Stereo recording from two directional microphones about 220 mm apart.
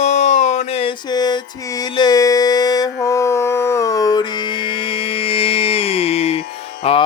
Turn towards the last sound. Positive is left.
turn(degrees=25)  # may be behind; listen again after turning